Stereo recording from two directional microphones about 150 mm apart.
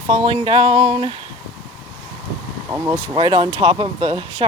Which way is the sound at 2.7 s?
15° right (ahead or behind).